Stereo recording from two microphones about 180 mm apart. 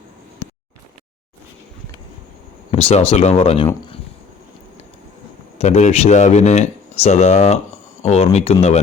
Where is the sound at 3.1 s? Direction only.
35° left (ahead or behind).